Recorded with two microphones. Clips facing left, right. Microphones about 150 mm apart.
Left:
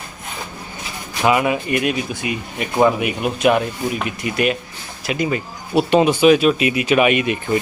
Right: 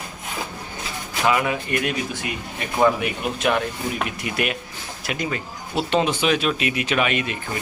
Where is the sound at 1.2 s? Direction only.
15° left (ahead or behind).